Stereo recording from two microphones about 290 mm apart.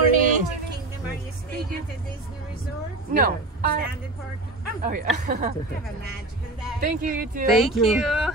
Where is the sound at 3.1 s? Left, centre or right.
Right.